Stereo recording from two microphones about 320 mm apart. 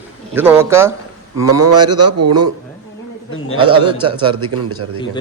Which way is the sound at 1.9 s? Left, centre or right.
Right.